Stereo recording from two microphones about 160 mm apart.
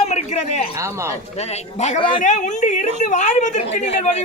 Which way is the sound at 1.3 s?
45° left (ahead or behind).